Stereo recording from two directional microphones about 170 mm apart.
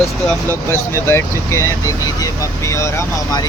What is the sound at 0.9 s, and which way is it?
Speech, 15° left (ahead or behind).